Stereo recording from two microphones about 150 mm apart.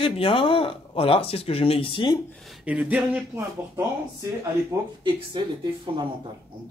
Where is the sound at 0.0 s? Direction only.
35° left (ahead or behind).